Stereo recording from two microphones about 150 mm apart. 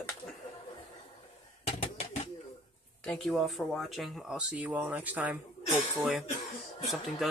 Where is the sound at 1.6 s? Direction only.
45° left (ahead or behind).